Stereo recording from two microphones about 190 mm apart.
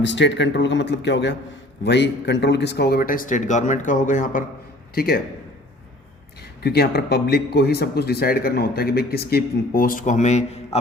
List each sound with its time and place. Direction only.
0.0 s speech: 70° left (ahead or behind); by 5.2 s 55° left (ahead or behind)
6.6 s a man's voice: 55° left (ahead or behind); by 10.8 s 35° left (ahead or behind)